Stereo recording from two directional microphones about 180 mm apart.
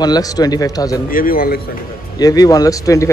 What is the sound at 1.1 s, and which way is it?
Speech, 50° left (ahead or behind).